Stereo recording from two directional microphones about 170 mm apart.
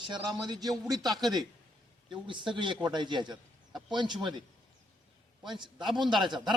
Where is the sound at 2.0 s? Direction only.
30° right (ahead or behind).